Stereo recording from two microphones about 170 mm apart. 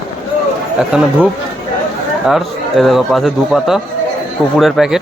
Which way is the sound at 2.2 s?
Centre (ahead or behind).